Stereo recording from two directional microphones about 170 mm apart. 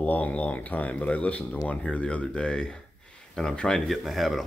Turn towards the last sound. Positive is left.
turn(degrees=0)  # may be behind; listen again after turning